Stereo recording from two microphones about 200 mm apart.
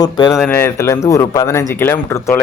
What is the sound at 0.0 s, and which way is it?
Speech, 20° left (ahead or behind).